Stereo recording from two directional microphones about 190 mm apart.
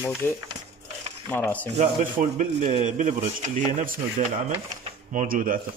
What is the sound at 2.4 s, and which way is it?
A man's voice, 40° right (ahead or behind).